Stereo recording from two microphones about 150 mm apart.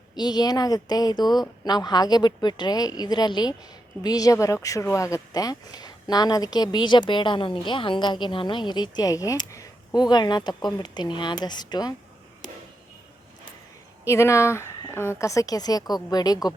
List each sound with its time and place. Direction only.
0.2 s speech: 25° left (ahead or behind)
14.0 s speech: 20° left (ahead or behind)